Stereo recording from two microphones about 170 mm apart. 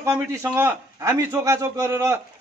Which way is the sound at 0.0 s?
15° right (ahead or behind).